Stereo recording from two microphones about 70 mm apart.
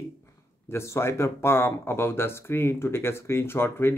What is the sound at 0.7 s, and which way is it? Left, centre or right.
Speech, left.